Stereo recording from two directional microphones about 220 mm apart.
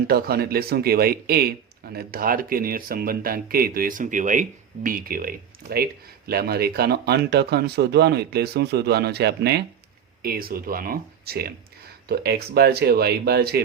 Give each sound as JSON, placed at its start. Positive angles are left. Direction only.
{"t": 0.1, "sound": "a man's voice", "side_deg": -45}